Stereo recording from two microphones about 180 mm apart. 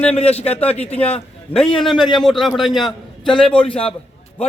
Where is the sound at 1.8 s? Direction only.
Centre (ahead or behind).